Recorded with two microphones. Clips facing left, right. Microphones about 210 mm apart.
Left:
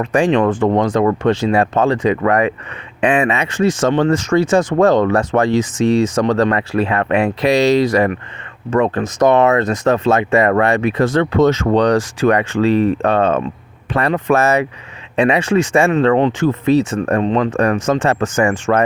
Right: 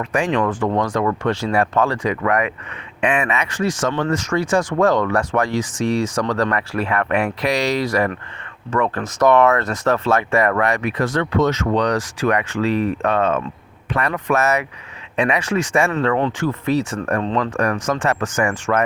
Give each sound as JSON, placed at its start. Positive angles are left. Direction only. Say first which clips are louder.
{"t": 0.0, "sound": "speech", "louder": "left 6 dB", "side_deg": 30}